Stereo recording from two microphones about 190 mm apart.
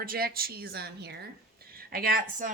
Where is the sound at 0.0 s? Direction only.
50° right (ahead or behind).